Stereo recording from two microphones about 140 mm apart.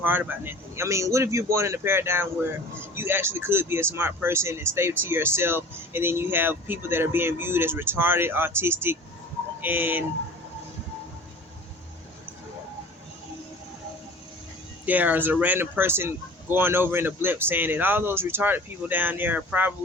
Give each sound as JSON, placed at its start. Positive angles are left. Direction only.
{"t": 0.0, "sound": "speech", "side_deg": -15}
{"t": 14.8, "sound": "speech", "side_deg": -10}